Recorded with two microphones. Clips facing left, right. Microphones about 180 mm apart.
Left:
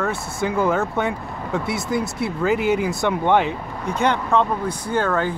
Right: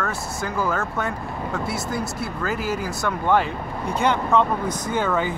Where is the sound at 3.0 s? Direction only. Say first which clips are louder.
Left 1 dB; 25° left (ahead or behind).